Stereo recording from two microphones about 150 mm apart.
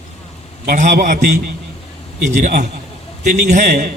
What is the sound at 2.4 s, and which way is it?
A man's voice, 80° right.